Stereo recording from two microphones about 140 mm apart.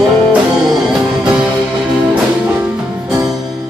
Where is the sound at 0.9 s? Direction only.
5° right (ahead or behind).